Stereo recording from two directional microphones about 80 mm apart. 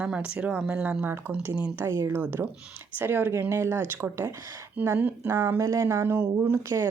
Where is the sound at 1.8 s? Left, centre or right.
Right.